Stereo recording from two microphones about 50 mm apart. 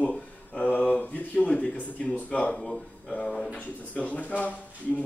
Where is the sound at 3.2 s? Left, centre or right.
Centre.